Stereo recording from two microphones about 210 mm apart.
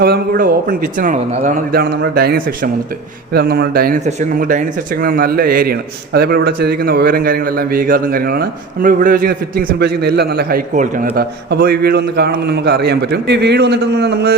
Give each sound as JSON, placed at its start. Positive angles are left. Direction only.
{"t": 0.0, "sound": "a man's voice", "side_deg": -45}